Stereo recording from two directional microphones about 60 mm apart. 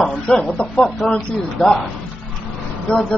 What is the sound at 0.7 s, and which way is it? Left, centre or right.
A man's voice, centre.